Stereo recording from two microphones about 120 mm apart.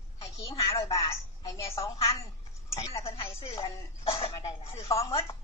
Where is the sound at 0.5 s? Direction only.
50° left (ahead or behind).